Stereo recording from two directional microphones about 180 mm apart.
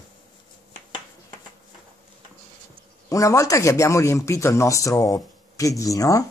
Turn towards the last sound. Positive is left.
turn(degrees=20)  # may be behind; listen again after turning